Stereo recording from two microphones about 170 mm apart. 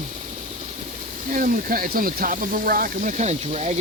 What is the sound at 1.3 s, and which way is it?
Speech, 55° right (ahead or behind).